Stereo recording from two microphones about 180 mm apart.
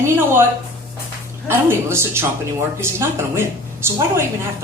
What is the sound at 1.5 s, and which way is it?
A woman's voice, 15° right (ahead or behind).